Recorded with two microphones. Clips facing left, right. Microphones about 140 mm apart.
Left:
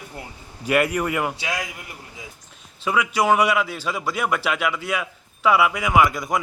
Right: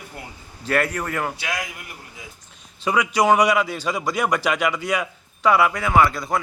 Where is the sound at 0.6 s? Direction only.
10° left (ahead or behind).